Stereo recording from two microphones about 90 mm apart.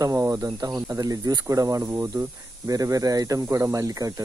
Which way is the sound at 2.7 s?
40° right (ahead or behind).